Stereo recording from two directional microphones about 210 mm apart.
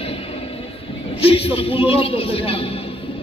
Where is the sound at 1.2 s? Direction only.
25° left (ahead or behind).